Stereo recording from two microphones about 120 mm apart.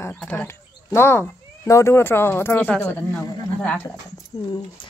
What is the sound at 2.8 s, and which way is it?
Speech, 5° left (ahead or behind).